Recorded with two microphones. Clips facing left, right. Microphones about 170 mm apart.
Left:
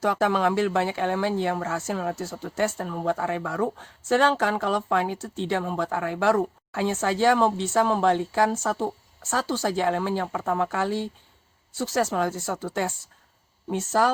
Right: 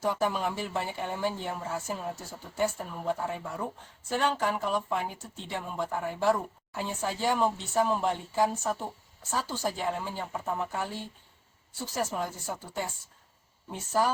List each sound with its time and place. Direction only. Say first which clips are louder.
0.0 s speech: left 6 dB; 90° left